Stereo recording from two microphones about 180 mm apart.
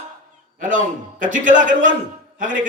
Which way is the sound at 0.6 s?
45° right (ahead or behind).